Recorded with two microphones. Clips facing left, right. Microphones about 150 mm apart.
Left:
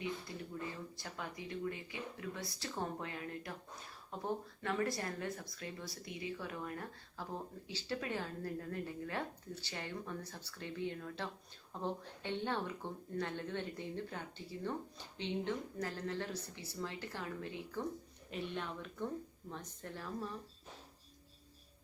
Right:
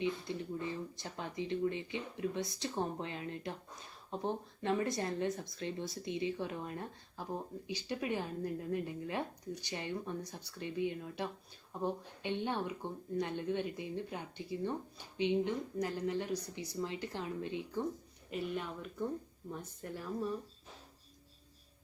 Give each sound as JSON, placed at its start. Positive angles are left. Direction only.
{"t": 0.0, "sound": "speech", "side_deg": -20}
{"t": 18.3, "sound": "speech", "side_deg": -5}